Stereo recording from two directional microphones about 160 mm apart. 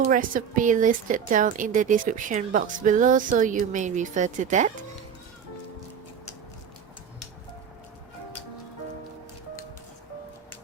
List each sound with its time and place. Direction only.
0.0 s a woman's voice: 55° right (ahead or behind)